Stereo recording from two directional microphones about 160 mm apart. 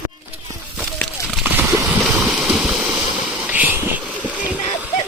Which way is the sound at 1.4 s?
15° right (ahead or behind).